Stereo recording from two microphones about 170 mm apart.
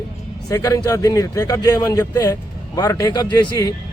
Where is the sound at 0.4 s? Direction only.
20° left (ahead or behind).